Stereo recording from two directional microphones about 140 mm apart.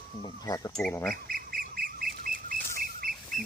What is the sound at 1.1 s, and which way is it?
Duck, 90° right.